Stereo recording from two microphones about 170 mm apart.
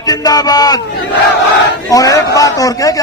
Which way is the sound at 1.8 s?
20° left (ahead or behind).